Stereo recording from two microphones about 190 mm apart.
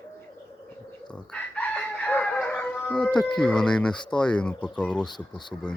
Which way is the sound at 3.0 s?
5° left (ahead or behind).